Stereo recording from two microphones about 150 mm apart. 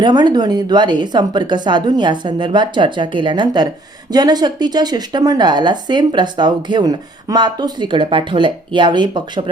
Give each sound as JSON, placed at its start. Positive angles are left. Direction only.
{"t": 0.0, "sound": "speech", "side_deg": -30}